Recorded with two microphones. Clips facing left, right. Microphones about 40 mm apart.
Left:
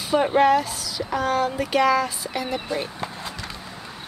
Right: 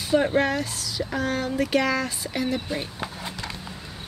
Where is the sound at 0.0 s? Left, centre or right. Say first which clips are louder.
Left 3 dB; centre.